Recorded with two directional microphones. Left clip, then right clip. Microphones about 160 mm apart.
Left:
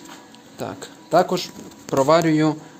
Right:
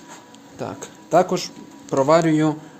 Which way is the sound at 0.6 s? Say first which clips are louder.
Even; 5° right (ahead or behind).